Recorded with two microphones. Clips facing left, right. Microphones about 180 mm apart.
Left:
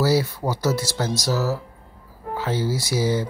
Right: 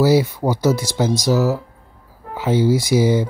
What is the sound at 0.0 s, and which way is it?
Speech, 20° right (ahead or behind).